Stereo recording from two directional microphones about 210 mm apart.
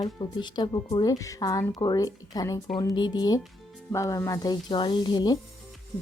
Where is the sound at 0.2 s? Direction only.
20° left (ahead or behind).